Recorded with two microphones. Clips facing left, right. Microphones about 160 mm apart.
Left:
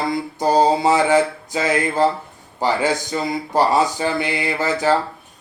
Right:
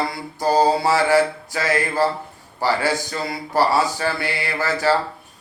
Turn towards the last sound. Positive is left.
turn(degrees=20)  # may be behind; listen again after turning